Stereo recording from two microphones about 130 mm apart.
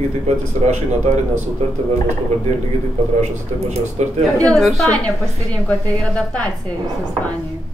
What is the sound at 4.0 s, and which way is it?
Speech, 65° right (ahead or behind).